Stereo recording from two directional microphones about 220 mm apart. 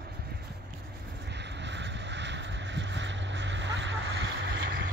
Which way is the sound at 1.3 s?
50° right (ahead or behind).